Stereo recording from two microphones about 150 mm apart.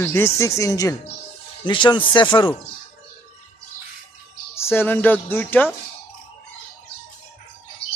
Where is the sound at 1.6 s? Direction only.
30° left (ahead or behind).